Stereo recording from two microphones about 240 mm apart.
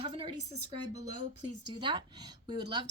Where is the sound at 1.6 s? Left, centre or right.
Centre.